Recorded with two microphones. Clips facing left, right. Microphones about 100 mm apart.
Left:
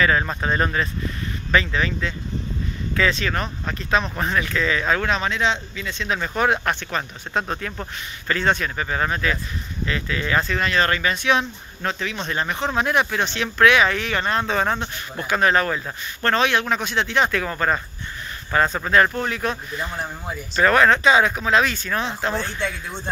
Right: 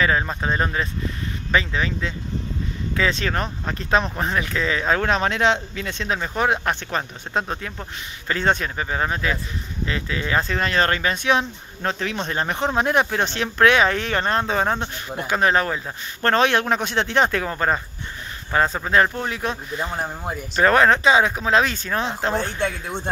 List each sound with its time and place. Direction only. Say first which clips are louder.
0.2 s speech: left 1 dB; 10° right (ahead or behind)
3.2 s speech: right 1 dB; 35° right (ahead or behind); by 6.0 s 55° right (ahead or behind)
6.1 s speech: left 1 dB; 20° right (ahead or behind)
10.6 s speech: even; 35° right (ahead or behind)
14.4 s speech: even; 20° right (ahead or behind)
16.2 s a man's voice: right 2 dB; 40° right (ahead or behind)
17.2 s speech: right 1 dB; 35° right (ahead or behind)
17.5 s speech: even; 25° right (ahead or behind)
22.3 s speech: right 2 dB; 15° right (ahead or behind)
22.6 s a man's voice: right 3 dB; 50° right (ahead or behind)